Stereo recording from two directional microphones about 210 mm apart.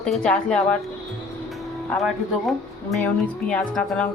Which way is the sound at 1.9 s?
Centre (ahead or behind).